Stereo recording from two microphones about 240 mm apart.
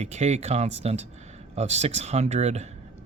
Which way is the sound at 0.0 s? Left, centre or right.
Right.